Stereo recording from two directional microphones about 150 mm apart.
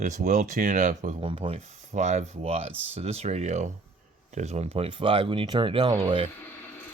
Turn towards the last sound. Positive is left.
turn(degrees=-40)  # may be behind; listen again after turning